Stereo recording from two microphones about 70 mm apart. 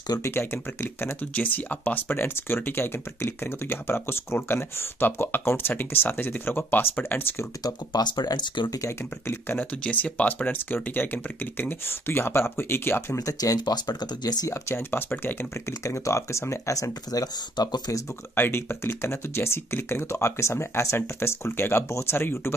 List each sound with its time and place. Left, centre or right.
0.2 s speech: left
1.3 s speech: left
7.6 s speech: left
9.3 s speech: left
9.8 s speech: centre; by 13.2 s left
13.2 s speech: left
14.7 s speech: left
15.8 s speech: left
18.3 s speech: left